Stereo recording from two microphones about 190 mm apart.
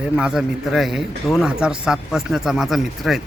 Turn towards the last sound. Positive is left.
turn(degrees=0)  # may be behind; listen again after turning